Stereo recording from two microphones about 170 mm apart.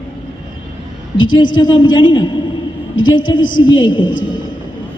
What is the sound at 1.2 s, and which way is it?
A man's voice, 25° left (ahead or behind).